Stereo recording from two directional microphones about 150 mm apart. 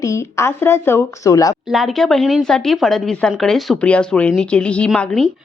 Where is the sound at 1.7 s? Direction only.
Centre (ahead or behind).